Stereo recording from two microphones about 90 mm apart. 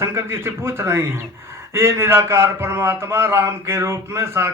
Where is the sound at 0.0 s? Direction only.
30° right (ahead or behind).